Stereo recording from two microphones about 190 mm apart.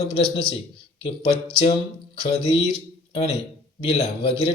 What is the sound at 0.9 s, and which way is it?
Speech, 30° left (ahead or behind).